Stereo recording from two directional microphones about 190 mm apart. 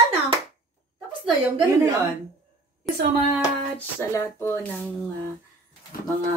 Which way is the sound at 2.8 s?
5° left (ahead or behind).